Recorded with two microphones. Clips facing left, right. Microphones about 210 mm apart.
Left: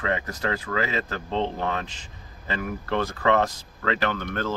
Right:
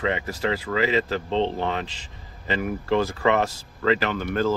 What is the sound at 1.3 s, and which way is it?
Speech, 25° right (ahead or behind).